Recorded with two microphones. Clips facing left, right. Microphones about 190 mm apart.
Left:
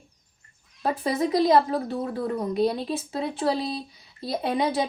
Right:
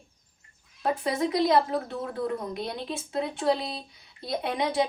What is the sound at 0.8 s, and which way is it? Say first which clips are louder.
A woman's voice: left 2 dB; 30° left (ahead or behind).